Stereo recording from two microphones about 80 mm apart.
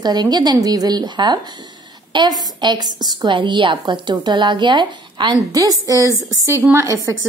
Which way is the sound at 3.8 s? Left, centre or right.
Right.